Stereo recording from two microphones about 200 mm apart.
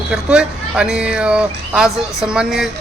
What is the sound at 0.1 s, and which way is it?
A man's voice, 5° right (ahead or behind).